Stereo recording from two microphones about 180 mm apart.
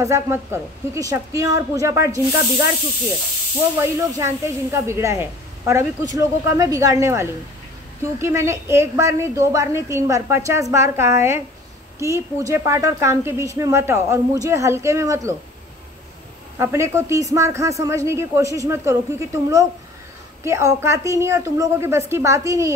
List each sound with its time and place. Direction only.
0.0 s speech: 15° right (ahead or behind)
3.8 s speech: 15° right (ahead or behind)
16.5 s speech: 15° right (ahead or behind)